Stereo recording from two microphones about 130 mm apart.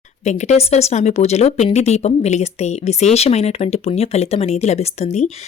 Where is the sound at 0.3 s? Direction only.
65° left (ahead or behind).